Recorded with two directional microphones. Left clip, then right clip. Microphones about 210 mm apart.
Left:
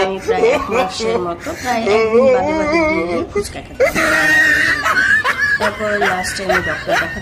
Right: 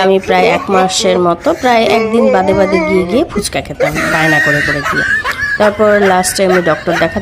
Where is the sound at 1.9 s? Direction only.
Centre (ahead or behind).